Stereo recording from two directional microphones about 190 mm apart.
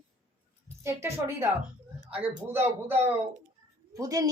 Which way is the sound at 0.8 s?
15° right (ahead or behind).